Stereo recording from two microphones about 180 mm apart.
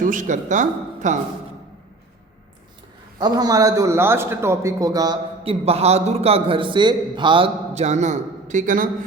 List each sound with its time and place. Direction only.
0.0 s speech: 45° right (ahead or behind)
3.2 s a man's voice: 20° right (ahead or behind)
5.4 s a man's voice: 30° right (ahead or behind)